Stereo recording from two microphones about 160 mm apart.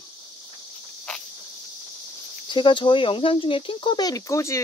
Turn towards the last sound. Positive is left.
turn(degrees=20)  # may be behind; listen again after turning